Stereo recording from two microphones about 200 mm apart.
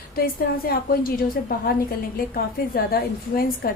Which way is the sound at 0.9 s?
50° left (ahead or behind).